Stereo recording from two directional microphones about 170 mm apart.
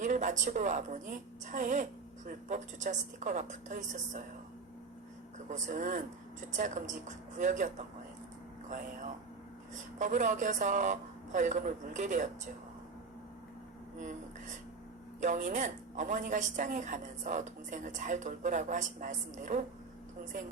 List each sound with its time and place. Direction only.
0.0 s a woman's voice: 45° right (ahead or behind)
5.5 s a woman's voice: 45° right (ahead or behind)
10.0 s a woman's voice: 45° right (ahead or behind)
15.2 s a woman's voice: 45° right (ahead or behind)